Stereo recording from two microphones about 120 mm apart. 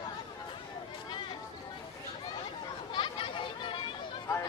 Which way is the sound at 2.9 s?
45° left (ahead or behind).